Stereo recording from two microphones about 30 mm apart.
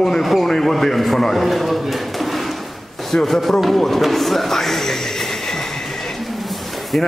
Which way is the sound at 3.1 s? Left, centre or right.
Centre.